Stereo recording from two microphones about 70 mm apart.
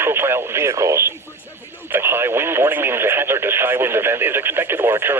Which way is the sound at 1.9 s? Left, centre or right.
Right.